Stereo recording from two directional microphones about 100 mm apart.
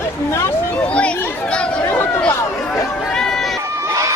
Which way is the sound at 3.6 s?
25° right (ahead or behind).